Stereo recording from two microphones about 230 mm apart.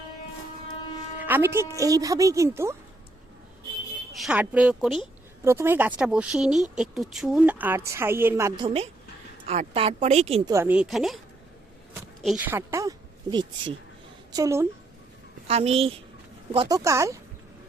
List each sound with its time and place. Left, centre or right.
1.2 s a woman's voice: centre
4.1 s a woman's voice: centre; by 10.5 s right
10.5 s speech: centre
12.2 s a woman's voice: centre
14.3 s a woman's voice: centre
15.4 s a woman's voice: right